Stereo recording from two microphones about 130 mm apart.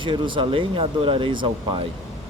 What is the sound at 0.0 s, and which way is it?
Speech, 40° right (ahead or behind).